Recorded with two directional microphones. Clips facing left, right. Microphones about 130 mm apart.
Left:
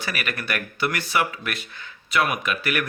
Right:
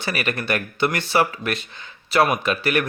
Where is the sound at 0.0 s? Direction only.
25° right (ahead or behind).